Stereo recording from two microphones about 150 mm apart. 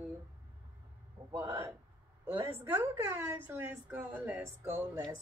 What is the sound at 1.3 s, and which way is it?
A woman's voice, 15° right (ahead or behind).